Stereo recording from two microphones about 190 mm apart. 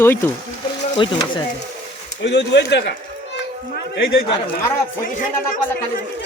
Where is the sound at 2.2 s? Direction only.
65° left (ahead or behind).